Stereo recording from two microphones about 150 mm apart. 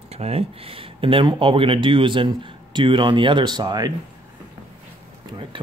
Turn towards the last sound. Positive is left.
turn(degrees=-30)  # may be behind; listen again after turning